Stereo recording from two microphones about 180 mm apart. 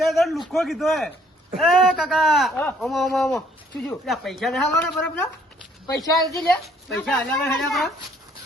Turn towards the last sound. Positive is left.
turn(degrees=0)  # may be behind; listen again after turning